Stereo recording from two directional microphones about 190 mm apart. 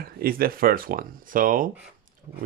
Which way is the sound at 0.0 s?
50° right (ahead or behind).